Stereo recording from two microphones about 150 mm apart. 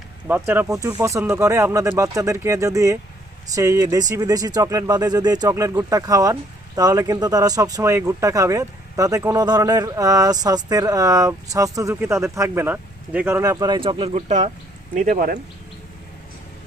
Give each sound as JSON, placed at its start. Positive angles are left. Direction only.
{"t": 0.3, "sound": "speech", "side_deg": -15}
{"t": 14.9, "sound": "speech", "side_deg": -65}